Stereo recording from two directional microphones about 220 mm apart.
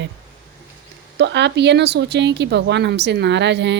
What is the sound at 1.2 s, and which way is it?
Speech, 50° right (ahead or behind).